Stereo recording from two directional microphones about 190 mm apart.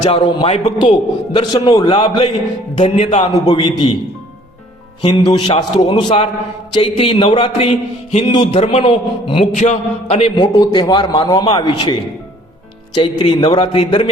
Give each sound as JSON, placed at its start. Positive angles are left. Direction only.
{"t": 0.0, "sound": "a man's voice", "side_deg": 35}
{"t": 0.8, "sound": "a man's voice", "side_deg": 25}
{"t": 5.0, "sound": "a man's voice", "side_deg": 25}
{"t": 13.0, "sound": "a man's voice", "side_deg": 25}